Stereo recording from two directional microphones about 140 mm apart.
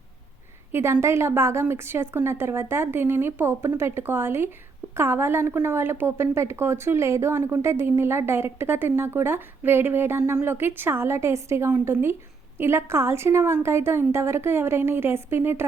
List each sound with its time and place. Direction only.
0.7 s a woman's voice: 20° right (ahead or behind)